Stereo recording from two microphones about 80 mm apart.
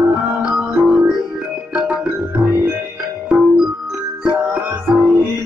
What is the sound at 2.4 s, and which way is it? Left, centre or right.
Music, centre.